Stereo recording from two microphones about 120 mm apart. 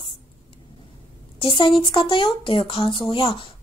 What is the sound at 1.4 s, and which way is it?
A woman's voice, 50° left (ahead or behind).